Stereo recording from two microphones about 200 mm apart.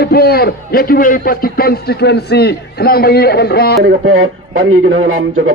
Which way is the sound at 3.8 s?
85° right.